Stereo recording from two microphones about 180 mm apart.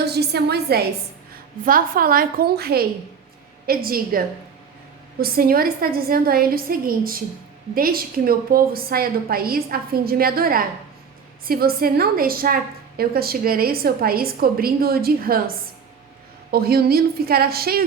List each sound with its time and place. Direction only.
0.0 s a woman's voice: 60° right (ahead or behind)
5.2 s a woman's voice: 55° right (ahead or behind)